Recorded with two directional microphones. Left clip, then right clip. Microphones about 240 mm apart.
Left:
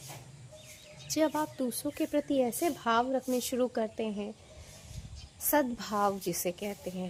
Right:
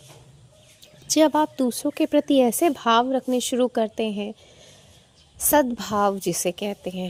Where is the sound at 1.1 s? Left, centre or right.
Right.